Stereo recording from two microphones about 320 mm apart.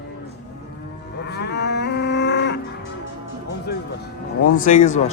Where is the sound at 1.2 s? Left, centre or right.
Left.